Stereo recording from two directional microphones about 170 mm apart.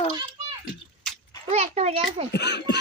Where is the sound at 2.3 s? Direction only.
80° left.